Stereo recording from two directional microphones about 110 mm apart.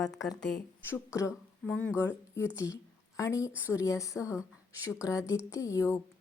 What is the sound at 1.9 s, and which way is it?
Speech, 25° left (ahead or behind).